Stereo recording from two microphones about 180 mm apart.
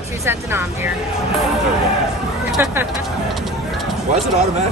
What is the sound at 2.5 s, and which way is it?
Speech, 10° right (ahead or behind).